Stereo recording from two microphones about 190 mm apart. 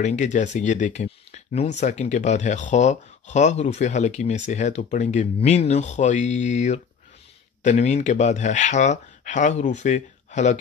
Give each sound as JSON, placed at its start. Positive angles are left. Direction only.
{"t": 0.0, "sound": "speech", "side_deg": 40}